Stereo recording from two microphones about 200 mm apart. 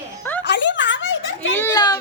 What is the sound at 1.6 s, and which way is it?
Speech, 15° left (ahead or behind).